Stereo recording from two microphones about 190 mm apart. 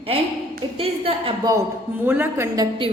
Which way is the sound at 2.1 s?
10° right (ahead or behind).